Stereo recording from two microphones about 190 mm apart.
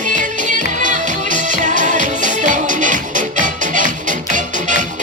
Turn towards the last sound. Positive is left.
turn(degrees=-40)  # may be behind; listen again after turning